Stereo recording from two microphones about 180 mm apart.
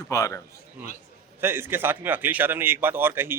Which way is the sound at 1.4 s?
10° right (ahead or behind).